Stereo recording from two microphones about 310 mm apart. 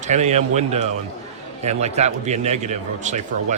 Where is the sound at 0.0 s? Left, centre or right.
Right.